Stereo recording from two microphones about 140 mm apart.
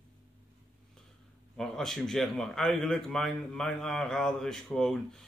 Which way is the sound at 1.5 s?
5° left (ahead or behind).